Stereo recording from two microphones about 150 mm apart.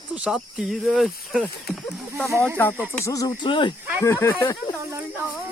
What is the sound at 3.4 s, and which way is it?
Speech, 35° left (ahead or behind).